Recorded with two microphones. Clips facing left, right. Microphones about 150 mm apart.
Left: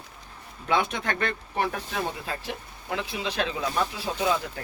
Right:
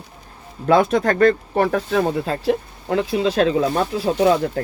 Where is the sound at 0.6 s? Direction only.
40° right (ahead or behind).